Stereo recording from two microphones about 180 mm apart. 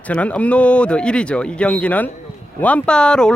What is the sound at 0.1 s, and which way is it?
Speech, 5° left (ahead or behind).